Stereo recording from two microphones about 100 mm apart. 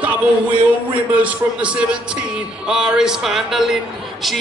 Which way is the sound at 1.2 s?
10° right (ahead or behind).